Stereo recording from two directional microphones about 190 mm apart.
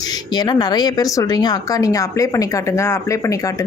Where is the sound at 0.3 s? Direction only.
20° left (ahead or behind).